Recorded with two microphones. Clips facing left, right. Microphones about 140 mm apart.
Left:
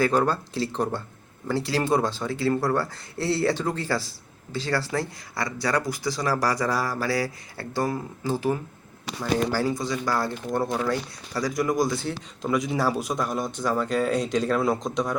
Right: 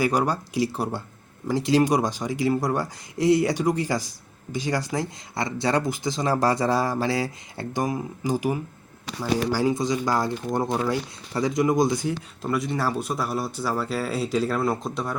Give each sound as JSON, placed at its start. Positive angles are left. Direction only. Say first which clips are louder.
{"t": 0.0, "sound": "speech", "louder": "left 1 dB", "side_deg": -15}
{"t": 12.4, "sound": "a man's voice", "louder": "left 3 dB", "side_deg": 0}